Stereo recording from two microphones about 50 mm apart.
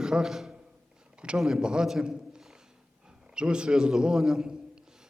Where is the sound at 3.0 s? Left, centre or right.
Centre.